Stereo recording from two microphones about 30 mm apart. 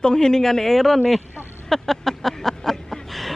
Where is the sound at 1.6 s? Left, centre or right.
Centre.